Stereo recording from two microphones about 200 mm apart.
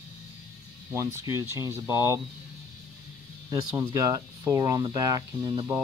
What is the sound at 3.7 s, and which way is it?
Speech, 15° right (ahead or behind).